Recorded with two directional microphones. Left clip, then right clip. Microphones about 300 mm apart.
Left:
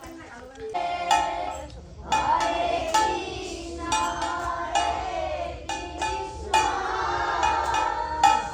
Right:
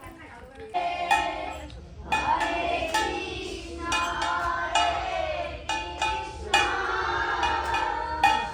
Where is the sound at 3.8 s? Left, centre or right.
Left.